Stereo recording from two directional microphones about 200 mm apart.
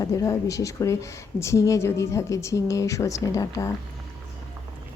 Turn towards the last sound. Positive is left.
turn(degrees=15)  # may be behind; listen again after turning